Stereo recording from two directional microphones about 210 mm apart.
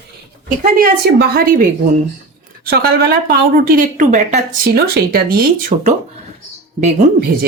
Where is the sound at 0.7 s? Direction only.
45° right (ahead or behind).